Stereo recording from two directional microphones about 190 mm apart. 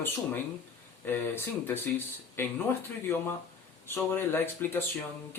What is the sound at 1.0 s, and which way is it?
Speech, 10° left (ahead or behind).